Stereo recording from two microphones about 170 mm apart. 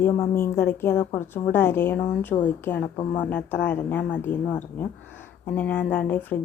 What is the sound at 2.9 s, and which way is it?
Speech, 25° left (ahead or behind).